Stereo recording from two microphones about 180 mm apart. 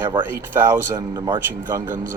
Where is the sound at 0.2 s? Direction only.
10° right (ahead or behind).